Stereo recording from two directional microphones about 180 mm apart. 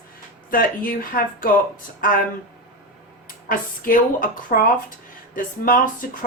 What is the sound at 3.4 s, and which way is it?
Speech, 50° left (ahead or behind).